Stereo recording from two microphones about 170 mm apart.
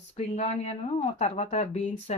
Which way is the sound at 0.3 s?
40° left (ahead or behind).